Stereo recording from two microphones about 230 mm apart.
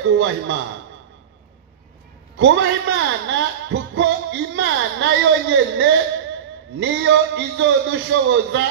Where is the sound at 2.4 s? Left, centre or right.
Right.